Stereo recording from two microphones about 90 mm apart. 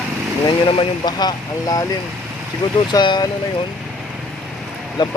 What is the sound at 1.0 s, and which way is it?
Speech, 50° left (ahead or behind).